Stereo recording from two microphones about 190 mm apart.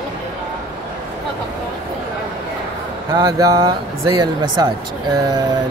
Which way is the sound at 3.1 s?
20° right (ahead or behind).